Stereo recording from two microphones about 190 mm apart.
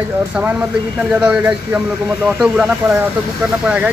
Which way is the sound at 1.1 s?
10° right (ahead or behind).